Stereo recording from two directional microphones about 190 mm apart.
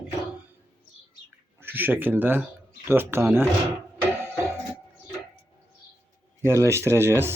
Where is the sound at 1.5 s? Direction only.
10° right (ahead or behind).